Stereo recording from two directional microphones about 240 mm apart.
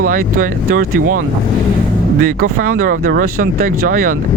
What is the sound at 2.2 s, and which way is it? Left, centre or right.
Speech, right.